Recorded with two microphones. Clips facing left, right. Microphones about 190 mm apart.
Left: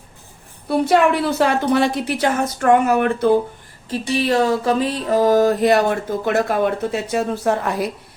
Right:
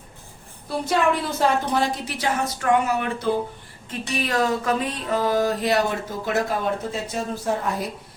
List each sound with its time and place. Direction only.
0.7 s a woman's voice: 65° left (ahead or behind)
3.8 s a sound: 30° left (ahead or behind); by 5.8 s 50° left (ahead or behind)
6.2 s speech: 60° left (ahead or behind)